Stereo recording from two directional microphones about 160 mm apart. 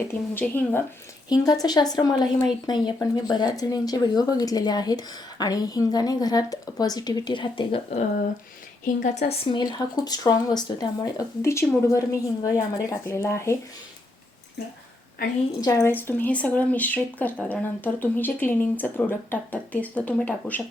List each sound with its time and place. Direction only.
0.1 s speech: 15° left (ahead or behind)
1.3 s speech: 25° left (ahead or behind)
9.3 s speech: 35° left (ahead or behind); by 13.6 s 15° left (ahead or behind)
15.6 s speech: 20° left (ahead or behind)